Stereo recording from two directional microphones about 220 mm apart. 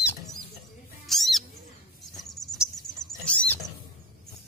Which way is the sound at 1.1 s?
Centre (ahead or behind).